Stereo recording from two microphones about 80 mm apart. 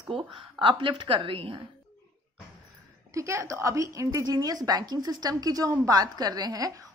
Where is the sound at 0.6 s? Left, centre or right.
Right.